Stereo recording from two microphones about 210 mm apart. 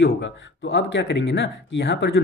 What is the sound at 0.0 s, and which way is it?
Speech, 65° left (ahead or behind).